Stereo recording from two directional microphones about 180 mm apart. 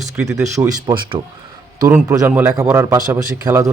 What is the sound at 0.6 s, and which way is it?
Speech, 25° right (ahead or behind).